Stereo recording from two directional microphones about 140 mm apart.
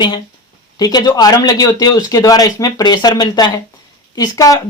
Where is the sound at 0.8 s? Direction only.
30° left (ahead or behind).